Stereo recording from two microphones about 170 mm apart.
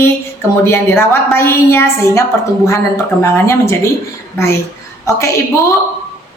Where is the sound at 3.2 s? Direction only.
15° left (ahead or behind).